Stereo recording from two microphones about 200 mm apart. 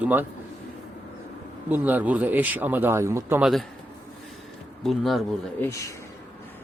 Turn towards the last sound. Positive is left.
turn(degrees=15)  # may be behind; listen again after turning